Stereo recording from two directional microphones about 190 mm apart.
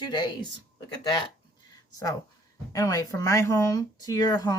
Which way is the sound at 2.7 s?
20° left (ahead or behind).